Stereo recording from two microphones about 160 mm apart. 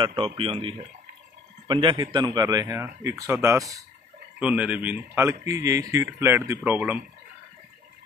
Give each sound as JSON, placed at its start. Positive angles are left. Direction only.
{"t": 0.0, "sound": "a man's voice", "side_deg": -35}
{"t": 4.4, "sound": "speech", "side_deg": -10}